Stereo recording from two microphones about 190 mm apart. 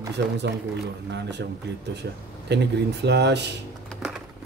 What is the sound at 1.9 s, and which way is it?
Speech, 60° right (ahead or behind).